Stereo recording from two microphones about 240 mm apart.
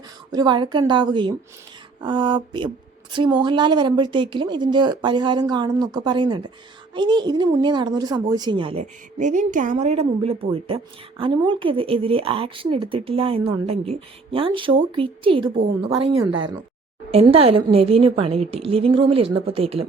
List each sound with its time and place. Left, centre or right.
0.3 s a woman's voice: centre